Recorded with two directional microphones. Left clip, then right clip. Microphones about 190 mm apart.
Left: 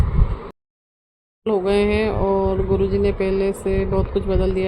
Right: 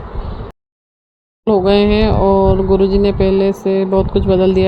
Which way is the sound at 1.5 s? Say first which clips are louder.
Right 6 dB; 25° right (ahead or behind).